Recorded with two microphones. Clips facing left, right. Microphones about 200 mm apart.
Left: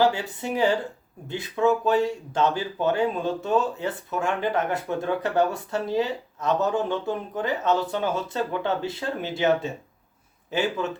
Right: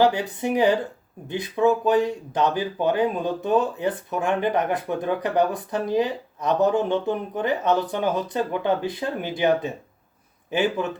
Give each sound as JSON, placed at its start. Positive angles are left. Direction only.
{"t": 0.0, "sound": "speech", "side_deg": -20}